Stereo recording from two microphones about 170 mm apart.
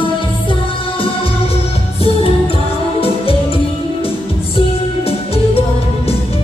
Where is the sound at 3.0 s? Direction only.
35° left (ahead or behind).